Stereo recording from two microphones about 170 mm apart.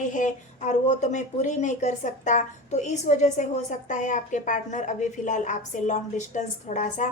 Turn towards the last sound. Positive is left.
turn(degrees=45)  # may be behind; listen again after turning